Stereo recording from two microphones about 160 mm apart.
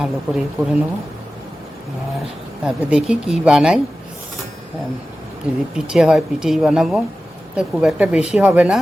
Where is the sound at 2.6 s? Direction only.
5° right (ahead or behind).